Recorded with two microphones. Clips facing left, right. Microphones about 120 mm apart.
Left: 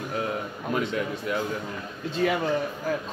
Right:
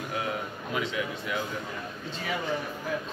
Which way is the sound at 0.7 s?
45° left (ahead or behind).